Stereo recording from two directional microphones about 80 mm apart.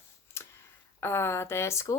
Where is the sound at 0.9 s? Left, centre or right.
Left.